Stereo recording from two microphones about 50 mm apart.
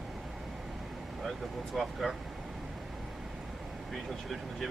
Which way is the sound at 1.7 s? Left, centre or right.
Centre.